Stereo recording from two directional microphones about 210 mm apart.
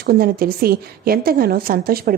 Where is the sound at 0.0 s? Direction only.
45° right (ahead or behind).